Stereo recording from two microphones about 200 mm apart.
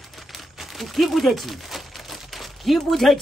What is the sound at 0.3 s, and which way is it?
Crumpling, centre (ahead or behind).